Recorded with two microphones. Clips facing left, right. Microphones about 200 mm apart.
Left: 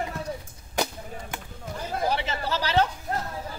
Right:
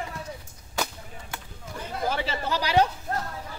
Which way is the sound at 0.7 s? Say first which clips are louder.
Left 3 dB; 20° left (ahead or behind).